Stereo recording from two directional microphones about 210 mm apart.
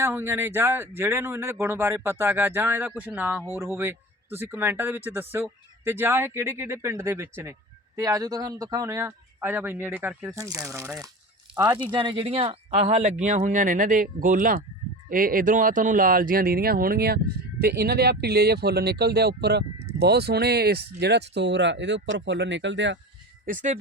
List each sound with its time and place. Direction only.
0.0 s speech: 10° right (ahead or behind); by 23.0 s 60° right (ahead or behind)
23.5 s speech: 35° right (ahead or behind)